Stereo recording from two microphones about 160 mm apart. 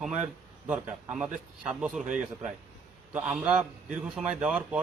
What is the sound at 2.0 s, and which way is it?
Speech, 55° right (ahead or behind).